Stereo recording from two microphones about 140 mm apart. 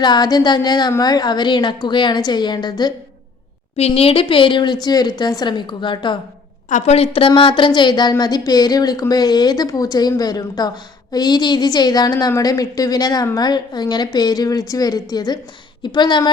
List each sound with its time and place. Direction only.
0.0 s a woman's voice: 30° left (ahead or behind)
3.8 s a woman's voice: 45° left (ahead or behind)
6.7 s a woman's voice: 55° left (ahead or behind); by 16.3 s 35° left (ahead or behind)